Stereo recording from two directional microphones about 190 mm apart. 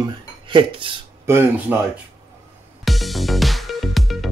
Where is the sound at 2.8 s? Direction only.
Centre (ahead or behind).